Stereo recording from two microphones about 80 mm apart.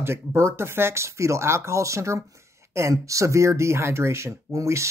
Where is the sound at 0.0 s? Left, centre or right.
Right.